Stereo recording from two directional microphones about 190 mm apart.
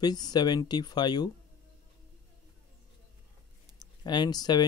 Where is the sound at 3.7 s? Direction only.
25° left (ahead or behind).